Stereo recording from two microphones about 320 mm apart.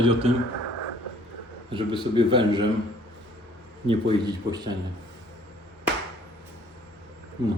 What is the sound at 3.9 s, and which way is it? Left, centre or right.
Speech, centre.